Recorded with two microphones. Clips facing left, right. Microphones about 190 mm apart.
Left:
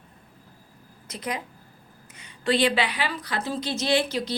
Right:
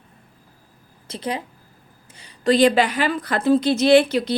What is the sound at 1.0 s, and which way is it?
A woman's voice, 30° right (ahead or behind).